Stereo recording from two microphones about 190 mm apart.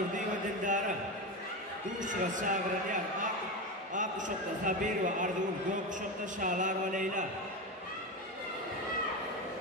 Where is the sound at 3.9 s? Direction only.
40° right (ahead or behind).